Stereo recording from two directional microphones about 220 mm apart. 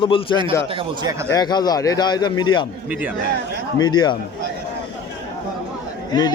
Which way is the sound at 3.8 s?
20° left (ahead or behind).